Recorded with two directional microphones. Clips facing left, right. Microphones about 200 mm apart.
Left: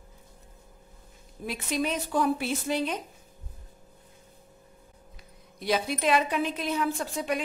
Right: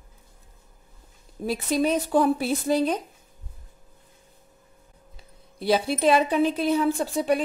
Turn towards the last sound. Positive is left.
turn(degrees=-35)  # may be behind; listen again after turning